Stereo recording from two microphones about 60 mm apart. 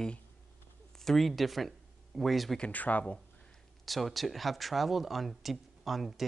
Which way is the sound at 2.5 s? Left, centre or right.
Left.